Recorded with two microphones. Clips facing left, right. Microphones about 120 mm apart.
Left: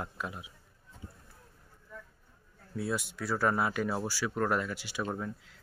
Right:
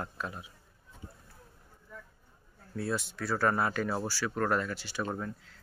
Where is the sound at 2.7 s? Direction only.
10° left (ahead or behind).